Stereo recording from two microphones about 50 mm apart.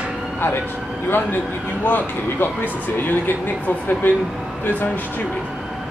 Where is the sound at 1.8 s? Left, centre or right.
Left.